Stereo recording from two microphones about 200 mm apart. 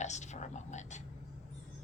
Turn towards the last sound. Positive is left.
turn(degrees=35)  # may be behind; listen again after turning